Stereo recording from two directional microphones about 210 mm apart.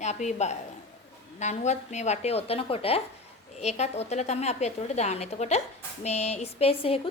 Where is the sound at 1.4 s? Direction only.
35° left (ahead or behind).